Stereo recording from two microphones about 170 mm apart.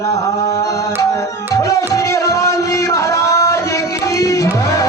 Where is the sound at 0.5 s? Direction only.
20° left (ahead or behind).